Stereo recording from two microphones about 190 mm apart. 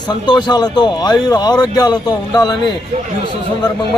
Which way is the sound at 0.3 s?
25° left (ahead or behind).